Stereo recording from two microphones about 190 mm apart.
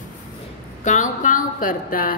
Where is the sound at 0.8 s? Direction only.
40° left (ahead or behind).